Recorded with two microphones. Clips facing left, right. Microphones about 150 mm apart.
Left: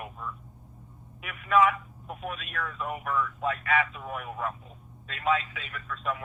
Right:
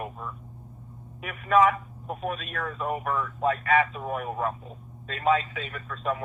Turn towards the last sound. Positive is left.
turn(degrees=-35)  # may be behind; listen again after turning